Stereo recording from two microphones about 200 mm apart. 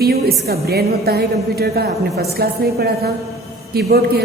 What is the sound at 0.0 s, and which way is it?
A woman's voice, 50° right (ahead or behind).